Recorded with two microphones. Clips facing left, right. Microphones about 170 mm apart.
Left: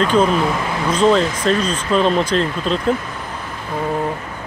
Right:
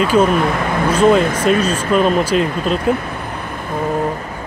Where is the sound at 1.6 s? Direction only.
10° right (ahead or behind).